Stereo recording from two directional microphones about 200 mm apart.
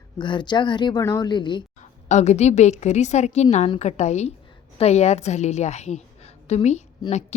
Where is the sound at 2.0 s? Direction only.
35° left (ahead or behind).